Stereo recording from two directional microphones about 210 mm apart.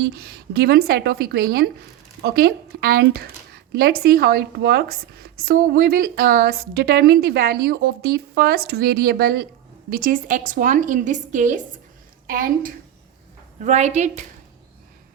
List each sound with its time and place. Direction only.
0.0 s a woman's voice: 50° right (ahead or behind); by 14.1 s 30° right (ahead or behind)